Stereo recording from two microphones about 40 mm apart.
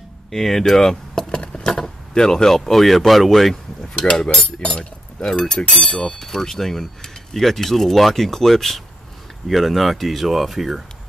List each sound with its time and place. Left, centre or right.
0.3 s speech: centre
4.0 s speech: centre